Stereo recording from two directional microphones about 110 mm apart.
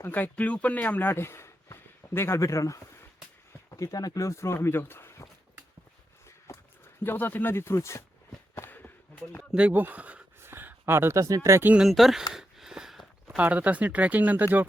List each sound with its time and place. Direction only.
0.0 s speech: 15° left (ahead or behind)
7.0 s speech: 20° left (ahead or behind)
8.5 s a sound: 20° left (ahead or behind)
9.4 s speech: 5° right (ahead or behind); by 11.7 s 25° right (ahead or behind)
11.7 s speech: 5° right (ahead or behind)
12.3 s a sound: 5° right (ahead or behind)
13.2 s speech: 15° right (ahead or behind)